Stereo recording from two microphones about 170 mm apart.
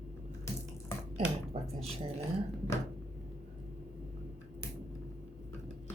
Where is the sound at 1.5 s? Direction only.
35° right (ahead or behind).